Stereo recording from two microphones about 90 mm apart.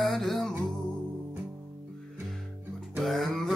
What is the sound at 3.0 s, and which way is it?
Music, centre (ahead or behind).